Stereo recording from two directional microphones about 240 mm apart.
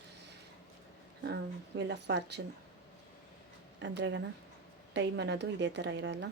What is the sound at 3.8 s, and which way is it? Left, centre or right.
A woman's voice, right.